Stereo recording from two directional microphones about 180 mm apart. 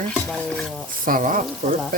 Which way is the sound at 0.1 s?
5° left (ahead or behind).